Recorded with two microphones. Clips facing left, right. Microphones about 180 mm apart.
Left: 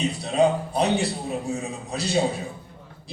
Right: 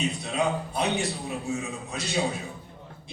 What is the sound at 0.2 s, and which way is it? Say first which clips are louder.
A man's voice: left 7 dB; 35° left (ahead or behind).